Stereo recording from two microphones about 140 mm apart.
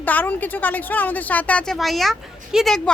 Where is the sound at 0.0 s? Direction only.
15° left (ahead or behind).